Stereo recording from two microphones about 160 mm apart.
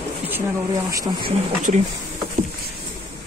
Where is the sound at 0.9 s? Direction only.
20° right (ahead or behind).